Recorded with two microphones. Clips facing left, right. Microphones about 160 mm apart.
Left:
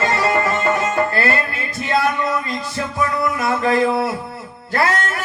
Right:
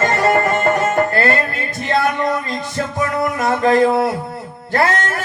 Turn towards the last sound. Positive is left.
turn(degrees=-40)  # may be behind; listen again after turning